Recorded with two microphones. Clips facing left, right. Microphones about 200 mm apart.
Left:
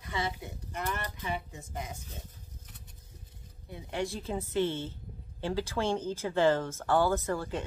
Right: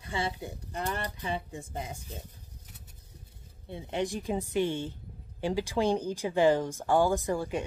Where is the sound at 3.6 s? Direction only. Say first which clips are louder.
Right 3 dB; 25° right (ahead or behind).